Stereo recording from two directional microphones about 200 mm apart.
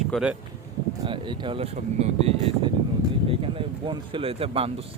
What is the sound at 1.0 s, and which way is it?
Speech, 25° right (ahead or behind).